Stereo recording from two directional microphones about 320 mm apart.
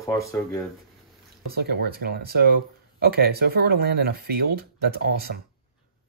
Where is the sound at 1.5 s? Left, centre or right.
Right.